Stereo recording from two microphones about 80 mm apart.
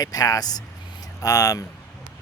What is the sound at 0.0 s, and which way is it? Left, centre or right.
Speech, left.